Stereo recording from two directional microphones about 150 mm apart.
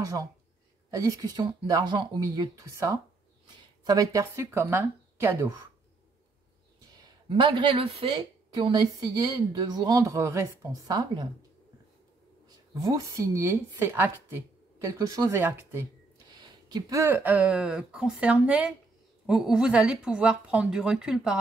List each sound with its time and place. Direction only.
0.0 s speech: 20° right (ahead or behind)
6.8 s speech: 25° right (ahead or behind)
12.4 s speech: 25° right (ahead or behind)
16.3 s a sound: 25° right (ahead or behind)
17.0 s a woman's voice: 10° right (ahead or behind)